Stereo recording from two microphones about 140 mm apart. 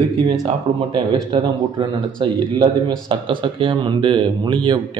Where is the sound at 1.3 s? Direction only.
35° right (ahead or behind).